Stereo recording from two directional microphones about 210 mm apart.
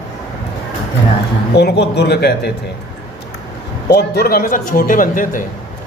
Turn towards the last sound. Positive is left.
turn(degrees=40)  # may be behind; listen again after turning